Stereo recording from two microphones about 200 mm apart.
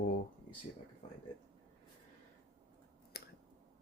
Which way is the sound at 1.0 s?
35° left (ahead or behind).